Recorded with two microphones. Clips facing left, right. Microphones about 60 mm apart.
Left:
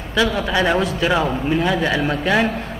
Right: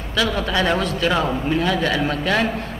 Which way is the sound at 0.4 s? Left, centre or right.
Centre.